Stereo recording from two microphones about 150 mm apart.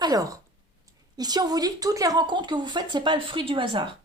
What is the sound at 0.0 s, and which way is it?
A woman's voice, 25° right (ahead or behind).